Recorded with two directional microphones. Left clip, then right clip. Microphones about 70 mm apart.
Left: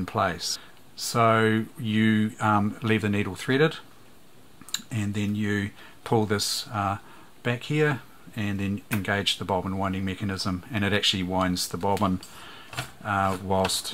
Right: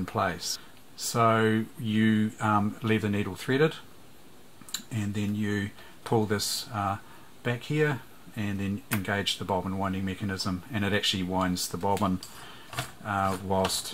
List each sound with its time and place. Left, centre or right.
0.0 s speech: left
13.0 s speech: left